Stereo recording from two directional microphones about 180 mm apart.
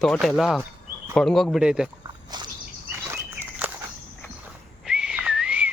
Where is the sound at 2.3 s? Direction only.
25° right (ahead or behind).